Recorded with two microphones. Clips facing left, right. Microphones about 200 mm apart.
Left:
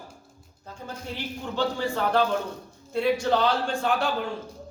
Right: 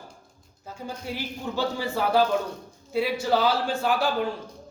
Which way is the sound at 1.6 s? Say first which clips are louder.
Left 1 dB; 5° right (ahead or behind).